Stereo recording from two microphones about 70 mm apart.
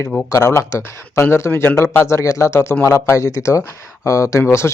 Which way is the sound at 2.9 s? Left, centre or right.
Left.